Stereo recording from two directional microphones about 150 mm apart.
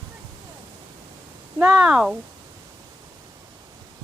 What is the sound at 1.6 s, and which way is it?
Speech, 5° right (ahead or behind).